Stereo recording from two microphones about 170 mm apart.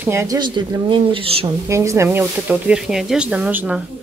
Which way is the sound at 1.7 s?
15° right (ahead or behind).